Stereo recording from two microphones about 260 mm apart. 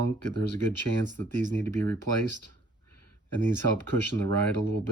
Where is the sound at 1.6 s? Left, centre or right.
Centre.